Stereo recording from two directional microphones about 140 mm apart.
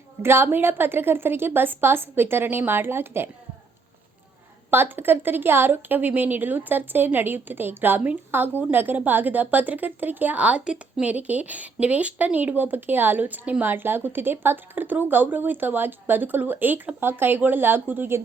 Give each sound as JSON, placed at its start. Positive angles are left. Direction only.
{"t": 0.2, "sound": "a woman's voice", "side_deg": -15}
{"t": 4.7, "sound": "a woman's voice", "side_deg": -15}